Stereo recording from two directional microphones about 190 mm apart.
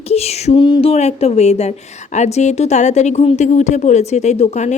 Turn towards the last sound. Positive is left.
turn(degrees=35)  # may be behind; listen again after turning